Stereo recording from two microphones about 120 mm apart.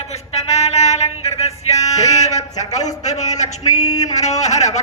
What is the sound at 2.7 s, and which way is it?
Music, 30° left (ahead or behind).